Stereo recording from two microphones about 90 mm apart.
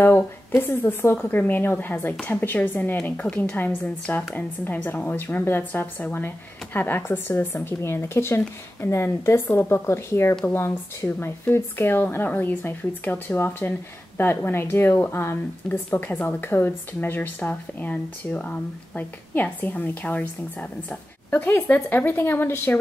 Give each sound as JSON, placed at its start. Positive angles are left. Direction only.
{"t": 0.0, "sound": "a woman's voice", "side_deg": 25}